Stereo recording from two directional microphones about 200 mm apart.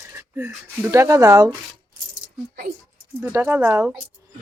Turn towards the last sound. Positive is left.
turn(degrees=-10)  # may be behind; listen again after turning